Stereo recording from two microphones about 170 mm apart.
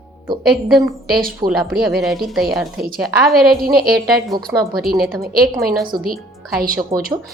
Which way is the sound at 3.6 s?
60° right (ahead or behind).